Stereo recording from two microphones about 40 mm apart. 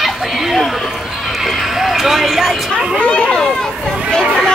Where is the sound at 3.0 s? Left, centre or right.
Left.